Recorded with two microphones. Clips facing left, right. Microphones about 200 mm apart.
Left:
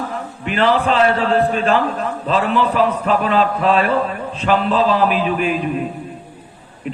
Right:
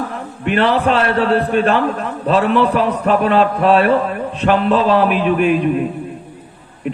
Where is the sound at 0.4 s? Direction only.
60° right (ahead or behind).